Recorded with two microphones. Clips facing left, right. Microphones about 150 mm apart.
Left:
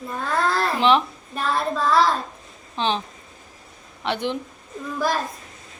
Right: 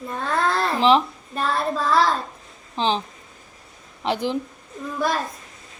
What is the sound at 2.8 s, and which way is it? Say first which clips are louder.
Speech: right 1 dB; 30° right (ahead or behind).